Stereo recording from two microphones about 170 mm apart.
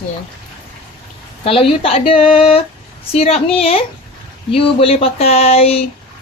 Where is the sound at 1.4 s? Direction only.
30° left (ahead or behind).